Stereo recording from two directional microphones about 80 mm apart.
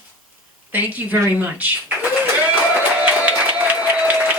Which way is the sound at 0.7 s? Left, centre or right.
Right.